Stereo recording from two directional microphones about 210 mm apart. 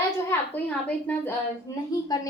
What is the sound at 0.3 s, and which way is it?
A woman's voice, 10° left (ahead or behind).